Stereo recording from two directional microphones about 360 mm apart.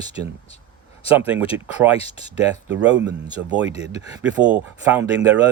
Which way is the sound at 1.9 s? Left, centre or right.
Centre.